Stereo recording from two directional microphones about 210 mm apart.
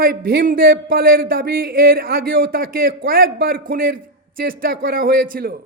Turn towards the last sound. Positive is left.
turn(degrees=-45)  # may be behind; listen again after turning